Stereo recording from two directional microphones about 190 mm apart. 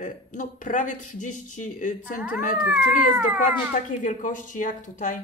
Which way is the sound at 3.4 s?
45° left (ahead or behind).